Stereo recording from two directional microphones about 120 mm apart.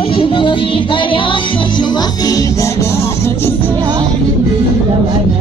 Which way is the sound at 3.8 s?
35° right (ahead or behind).